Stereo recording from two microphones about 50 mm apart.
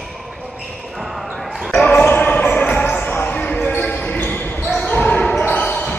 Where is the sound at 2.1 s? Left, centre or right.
Left.